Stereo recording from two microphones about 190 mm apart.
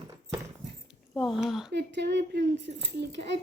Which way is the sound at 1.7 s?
60° right (ahead or behind).